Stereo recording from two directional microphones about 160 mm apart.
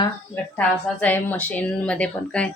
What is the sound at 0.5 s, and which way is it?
Speech, 10° left (ahead or behind).